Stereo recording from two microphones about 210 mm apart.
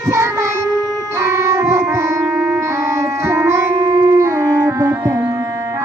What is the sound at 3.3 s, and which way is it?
Music, 15° right (ahead or behind).